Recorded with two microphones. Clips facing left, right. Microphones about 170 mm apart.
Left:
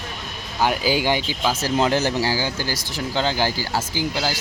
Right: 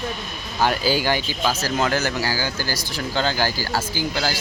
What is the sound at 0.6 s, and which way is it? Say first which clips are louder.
Speech: even; 15° left (ahead or behind).